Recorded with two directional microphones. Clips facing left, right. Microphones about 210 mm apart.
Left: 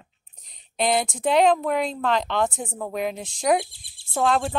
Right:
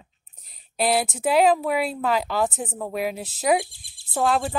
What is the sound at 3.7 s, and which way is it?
Speech, 45° right (ahead or behind).